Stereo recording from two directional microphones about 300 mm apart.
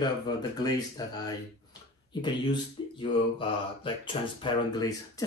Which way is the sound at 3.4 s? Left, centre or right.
Centre.